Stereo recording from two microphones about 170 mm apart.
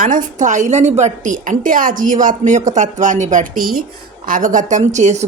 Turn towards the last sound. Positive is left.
turn(degrees=-45)  # may be behind; listen again after turning